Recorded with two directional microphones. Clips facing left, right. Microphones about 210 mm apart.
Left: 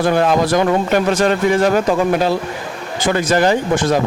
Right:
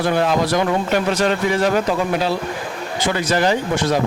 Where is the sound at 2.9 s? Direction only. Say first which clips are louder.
Left 4 dB; 50° left (ahead or behind).